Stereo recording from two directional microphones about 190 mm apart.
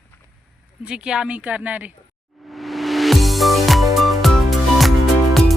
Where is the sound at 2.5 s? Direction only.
Centre (ahead or behind).